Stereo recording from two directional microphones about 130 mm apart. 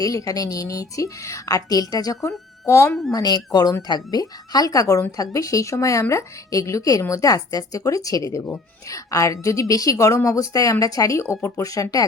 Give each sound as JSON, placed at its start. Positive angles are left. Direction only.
{"t": 0.0, "sound": "speech", "side_deg": 25}